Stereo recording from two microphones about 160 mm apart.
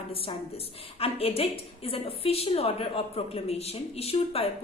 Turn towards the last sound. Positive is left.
turn(degrees=40)  # may be behind; listen again after turning